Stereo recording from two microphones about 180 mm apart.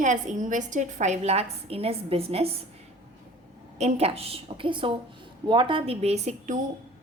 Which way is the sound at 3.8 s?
35° right (ahead or behind).